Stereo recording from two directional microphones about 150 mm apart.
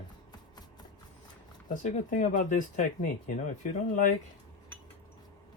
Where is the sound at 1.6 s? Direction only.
60° left (ahead or behind).